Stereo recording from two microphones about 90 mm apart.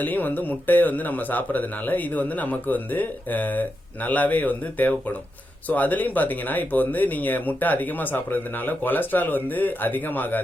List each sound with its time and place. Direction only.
0.0 s speech: 20° left (ahead or behind)